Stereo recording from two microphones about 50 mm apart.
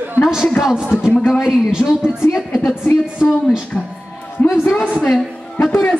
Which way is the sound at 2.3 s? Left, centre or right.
Centre.